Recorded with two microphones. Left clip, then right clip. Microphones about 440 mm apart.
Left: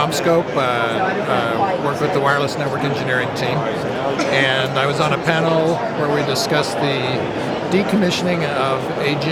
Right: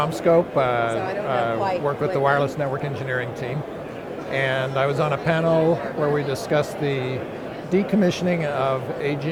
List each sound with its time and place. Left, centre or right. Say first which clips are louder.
0.0 s speech: left 2 dB; right
2.2 s speech: left 1 dB; right
4.4 s speech: left 2 dB; right
6.5 s speech: left 4 dB; right